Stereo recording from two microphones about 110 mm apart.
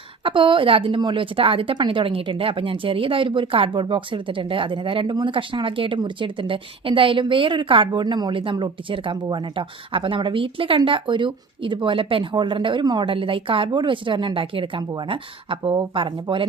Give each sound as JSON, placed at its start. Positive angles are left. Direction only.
{"t": 0.2, "sound": "a woman's voice", "side_deg": -50}
{"t": 13.1, "sound": "a woman's voice", "side_deg": -55}